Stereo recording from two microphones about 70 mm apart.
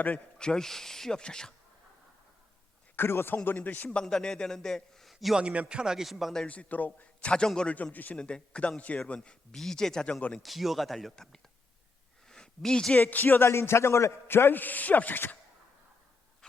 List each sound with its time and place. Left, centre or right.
0.3 s a man's voice: centre
2.9 s speech: left
3.8 s a man's voice: centre
5.4 s speech: centre
6.3 s a man's voice: centre
7.9 s a man's voice: left
10.4 s speech: centre
12.3 s a sound: centre
13.0 s a man's voice: left
16.4 s a sound: centre